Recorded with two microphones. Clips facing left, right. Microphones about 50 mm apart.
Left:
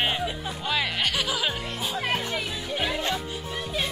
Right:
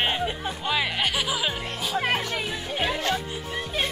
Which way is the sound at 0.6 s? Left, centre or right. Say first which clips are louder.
Right 1 dB; centre.